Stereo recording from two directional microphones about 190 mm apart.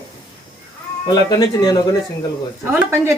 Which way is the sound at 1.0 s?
20° left (ahead or behind).